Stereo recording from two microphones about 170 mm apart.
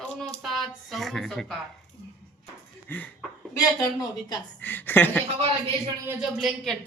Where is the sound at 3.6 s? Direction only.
20° left (ahead or behind).